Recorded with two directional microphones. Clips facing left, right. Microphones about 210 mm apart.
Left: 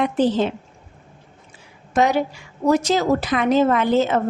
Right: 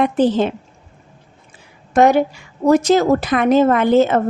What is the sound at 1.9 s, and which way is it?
A woman's voice, 50° right (ahead or behind).